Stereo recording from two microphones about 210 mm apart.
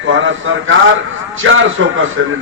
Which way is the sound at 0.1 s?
65° right (ahead or behind).